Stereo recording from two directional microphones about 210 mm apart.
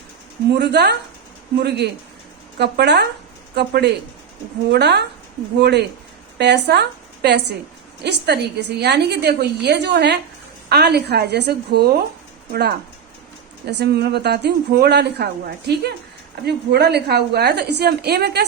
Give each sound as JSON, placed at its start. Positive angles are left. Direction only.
{"t": 0.5, "sound": "a woman's voice", "side_deg": -55}
{"t": 13.7, "sound": "a woman's voice", "side_deg": -50}